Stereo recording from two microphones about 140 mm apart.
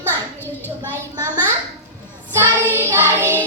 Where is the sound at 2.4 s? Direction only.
15° right (ahead or behind).